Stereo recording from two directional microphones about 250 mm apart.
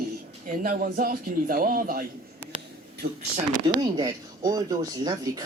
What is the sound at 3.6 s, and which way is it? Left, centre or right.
Speech, centre.